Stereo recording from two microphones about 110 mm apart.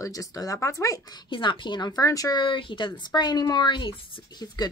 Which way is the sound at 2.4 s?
50° left (ahead or behind).